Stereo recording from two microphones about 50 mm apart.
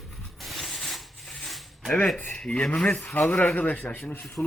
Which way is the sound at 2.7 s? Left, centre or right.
Left.